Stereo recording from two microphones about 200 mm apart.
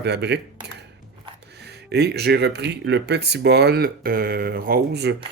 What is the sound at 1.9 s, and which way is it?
Speech, 55° right (ahead or behind).